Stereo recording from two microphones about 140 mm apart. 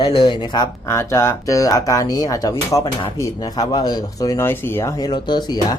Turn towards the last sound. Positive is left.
turn(degrees=30)  # may be behind; listen again after turning